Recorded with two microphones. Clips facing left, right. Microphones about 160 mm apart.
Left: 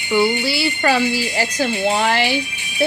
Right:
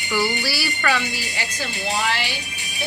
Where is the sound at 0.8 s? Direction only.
35° left (ahead or behind).